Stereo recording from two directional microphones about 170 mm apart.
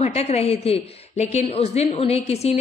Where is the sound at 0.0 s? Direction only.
40° left (ahead or behind).